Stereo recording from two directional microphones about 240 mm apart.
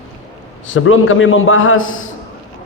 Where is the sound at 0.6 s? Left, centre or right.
Left.